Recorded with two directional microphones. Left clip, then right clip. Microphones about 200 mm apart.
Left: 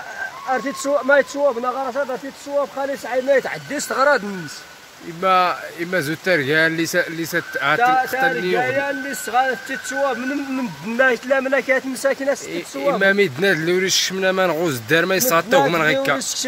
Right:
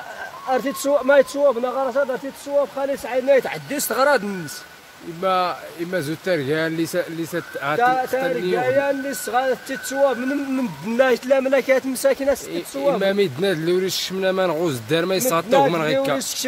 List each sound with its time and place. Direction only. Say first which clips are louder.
0.5 s speech: right 1 dB; 40° right (ahead or behind)
3.3 s speech: right 1 dB; 45° right (ahead or behind)
5.2 s speech: left 4 dB; 5° left (ahead or behind)
7.8 s speech: left 1 dB; 60° right (ahead or behind)
10.9 s speech: even; 50° right (ahead or behind)
13.0 s speech: left 3 dB; centre (ahead or behind)